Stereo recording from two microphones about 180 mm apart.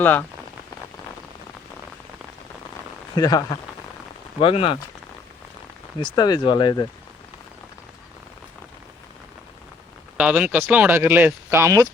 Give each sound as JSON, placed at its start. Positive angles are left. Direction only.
{"t": 0.0, "sound": "speech", "side_deg": 10}
{"t": 3.2, "sound": "speech", "side_deg": 20}
{"t": 4.4, "sound": "speech", "side_deg": 30}
{"t": 6.0, "sound": "speech", "side_deg": 25}
{"t": 10.2, "sound": "speech", "side_deg": -5}